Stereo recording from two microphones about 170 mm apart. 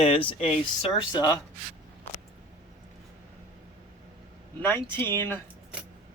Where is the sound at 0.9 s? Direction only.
25° left (ahead or behind).